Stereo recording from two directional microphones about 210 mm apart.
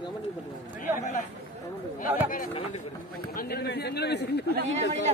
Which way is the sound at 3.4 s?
50° left (ahead or behind).